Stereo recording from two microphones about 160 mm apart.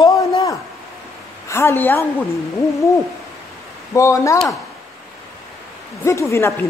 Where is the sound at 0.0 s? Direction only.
20° left (ahead or behind).